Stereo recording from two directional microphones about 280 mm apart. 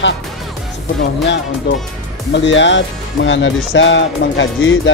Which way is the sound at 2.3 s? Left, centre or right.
Left.